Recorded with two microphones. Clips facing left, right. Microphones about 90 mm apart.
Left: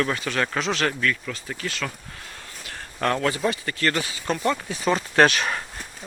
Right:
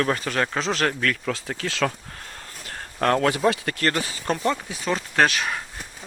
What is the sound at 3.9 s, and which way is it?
Speech, 35° right (ahead or behind).